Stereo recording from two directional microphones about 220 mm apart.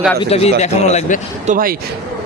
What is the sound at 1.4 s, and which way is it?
Speech, 40° right (ahead or behind).